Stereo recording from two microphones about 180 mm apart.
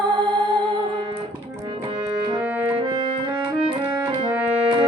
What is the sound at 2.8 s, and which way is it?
Music, 25° right (ahead or behind).